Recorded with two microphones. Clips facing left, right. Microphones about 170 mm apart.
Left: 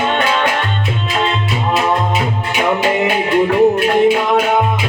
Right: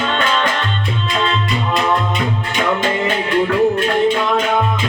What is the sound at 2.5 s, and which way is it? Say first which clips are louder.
Music: left 4 dB; 10° left (ahead or behind).